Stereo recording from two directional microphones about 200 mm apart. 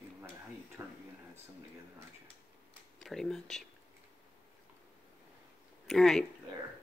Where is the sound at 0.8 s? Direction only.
15° right (ahead or behind).